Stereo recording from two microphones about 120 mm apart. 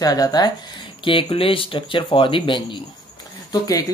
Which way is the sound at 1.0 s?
45° left (ahead or behind).